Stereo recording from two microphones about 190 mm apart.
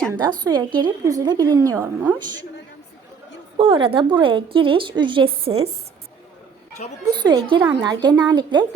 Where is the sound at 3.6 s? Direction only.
30° right (ahead or behind).